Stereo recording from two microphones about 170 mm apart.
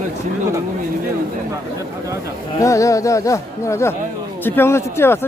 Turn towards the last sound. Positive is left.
turn(degrees=15)  # may be behind; listen again after turning